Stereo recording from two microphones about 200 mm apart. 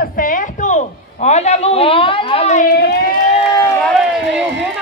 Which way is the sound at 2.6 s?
55° left (ahead or behind).